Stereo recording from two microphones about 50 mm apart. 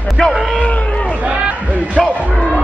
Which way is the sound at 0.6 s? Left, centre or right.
Left.